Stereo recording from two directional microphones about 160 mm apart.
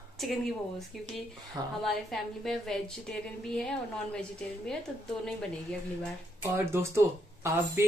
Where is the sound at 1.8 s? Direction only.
Centre (ahead or behind).